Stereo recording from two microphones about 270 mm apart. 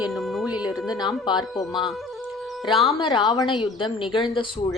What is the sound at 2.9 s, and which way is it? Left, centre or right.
Speech, centre.